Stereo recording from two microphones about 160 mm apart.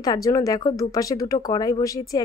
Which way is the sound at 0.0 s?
20° left (ahead or behind).